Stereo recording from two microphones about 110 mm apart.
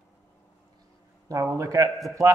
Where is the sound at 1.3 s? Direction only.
30° right (ahead or behind).